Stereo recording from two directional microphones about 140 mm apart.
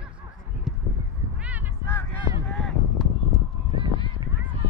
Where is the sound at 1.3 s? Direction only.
10° right (ahead or behind).